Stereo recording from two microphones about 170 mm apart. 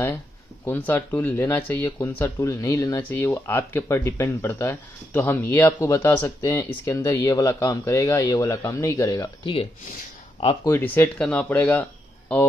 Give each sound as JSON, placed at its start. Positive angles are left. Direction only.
{"t": 0.7, "sound": "speech", "side_deg": 10}
{"t": 10.7, "sound": "speech", "side_deg": 10}